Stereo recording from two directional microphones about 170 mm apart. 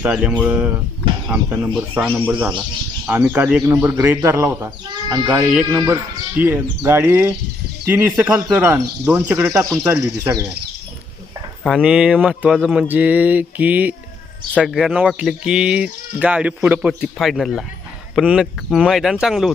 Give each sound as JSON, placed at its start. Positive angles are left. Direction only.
{"t": 0.0, "sound": "speech", "side_deg": -5}
{"t": 11.6, "sound": "speech", "side_deg": -5}